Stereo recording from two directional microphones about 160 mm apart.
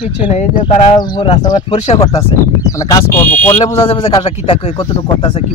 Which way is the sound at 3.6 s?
35° left (ahead or behind).